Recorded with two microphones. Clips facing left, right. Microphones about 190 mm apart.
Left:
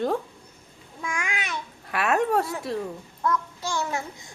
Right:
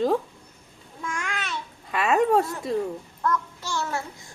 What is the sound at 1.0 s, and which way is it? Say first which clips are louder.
Babbling: even; 10° left (ahead or behind).